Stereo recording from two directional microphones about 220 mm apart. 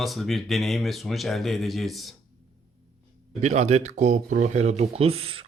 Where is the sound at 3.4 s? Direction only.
30° right (ahead or behind).